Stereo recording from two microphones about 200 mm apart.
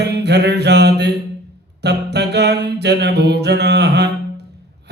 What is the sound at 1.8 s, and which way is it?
Mantra, 55° right (ahead or behind).